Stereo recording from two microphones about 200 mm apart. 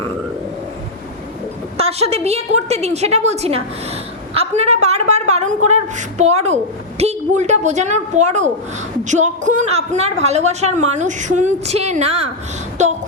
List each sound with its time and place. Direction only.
1.8 s a woman's voice: 30° right (ahead or behind)